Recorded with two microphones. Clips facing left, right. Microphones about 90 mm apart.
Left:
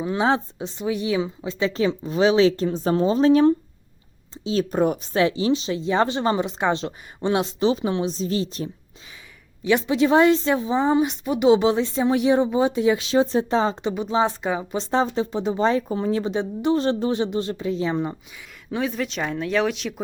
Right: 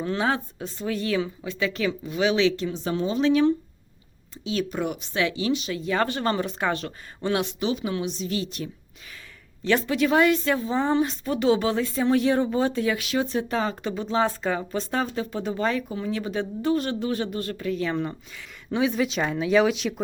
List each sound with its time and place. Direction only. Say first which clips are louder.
0.0 s speech: left 4 dB; 15° left (ahead or behind); by 8.7 s 30° left (ahead or behind)
9.6 s speech: left 3 dB; 20° left (ahead or behind)
18.7 s speech: right 2 dB; centre (ahead or behind)